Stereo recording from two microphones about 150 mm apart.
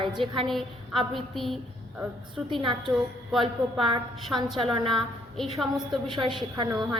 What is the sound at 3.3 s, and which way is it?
Child singing, centre (ahead or behind).